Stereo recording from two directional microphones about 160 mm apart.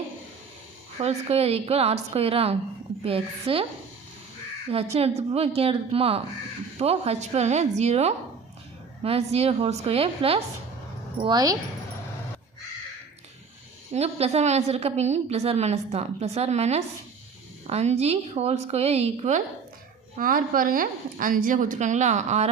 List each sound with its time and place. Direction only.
0.9 s a woman's voice: 40° right (ahead or behind)
4.7 s a woman's voice: 40° right (ahead or behind)
11.2 s speech: 25° right (ahead or behind)
13.9 s a woman's voice: 40° right (ahead or behind)
20.1 s a woman's voice: 60° right (ahead or behind); by 22.4 s 45° right (ahead or behind)